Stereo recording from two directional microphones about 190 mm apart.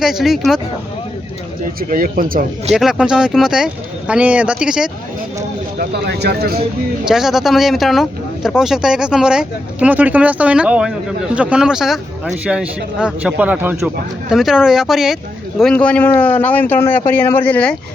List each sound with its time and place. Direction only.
0.0 s speech: centre (ahead or behind)
1.9 s speech: 50° right (ahead or behind)
2.7 s speech: 5° right (ahead or behind)
5.8 s speech: 55° right (ahead or behind)
7.0 s speech: centre (ahead or behind)